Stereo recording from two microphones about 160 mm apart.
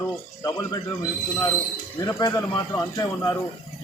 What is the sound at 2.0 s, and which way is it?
A man's voice, 15° left (ahead or behind).